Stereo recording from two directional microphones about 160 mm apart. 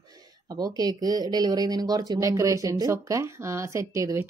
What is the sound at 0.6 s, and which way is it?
Speech, 25° right (ahead or behind).